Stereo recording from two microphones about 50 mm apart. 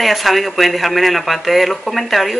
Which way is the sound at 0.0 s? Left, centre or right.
Centre.